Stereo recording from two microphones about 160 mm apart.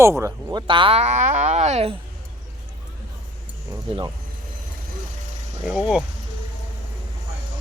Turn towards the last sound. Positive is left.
turn(degrees=-5)  # may be behind; listen again after turning